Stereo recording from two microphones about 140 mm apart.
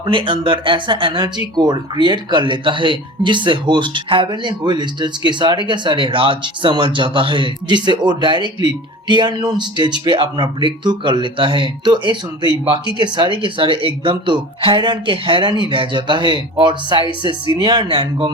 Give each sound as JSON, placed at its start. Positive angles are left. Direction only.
{"t": 0.0, "sound": "speech", "side_deg": -35}